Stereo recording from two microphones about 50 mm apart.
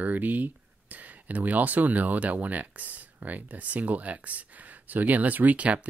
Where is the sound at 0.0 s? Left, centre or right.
Right.